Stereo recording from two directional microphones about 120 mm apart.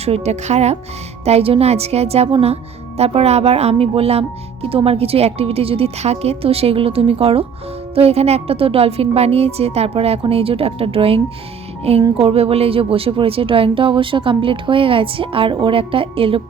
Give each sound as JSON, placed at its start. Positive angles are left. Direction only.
{"t": 0.0, "sound": "a woman's voice", "side_deg": -60}
{"t": 1.2, "sound": "a woman's voice", "side_deg": -55}
{"t": 11.8, "sound": "music", "side_deg": -55}
{"t": 12.2, "sound": "speech", "side_deg": -55}